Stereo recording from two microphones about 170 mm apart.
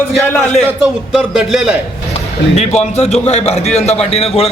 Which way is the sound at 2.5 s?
40° left (ahead or behind).